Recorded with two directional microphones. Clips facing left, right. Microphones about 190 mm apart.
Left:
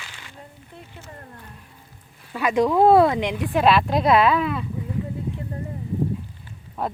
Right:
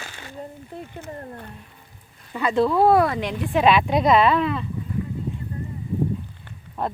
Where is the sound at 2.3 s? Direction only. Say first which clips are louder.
Left 1 dB; 15° left (ahead or behind).